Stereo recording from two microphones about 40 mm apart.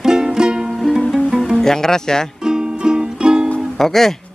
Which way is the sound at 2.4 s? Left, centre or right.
Centre.